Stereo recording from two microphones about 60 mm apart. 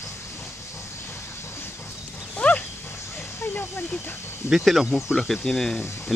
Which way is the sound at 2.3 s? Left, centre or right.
Left.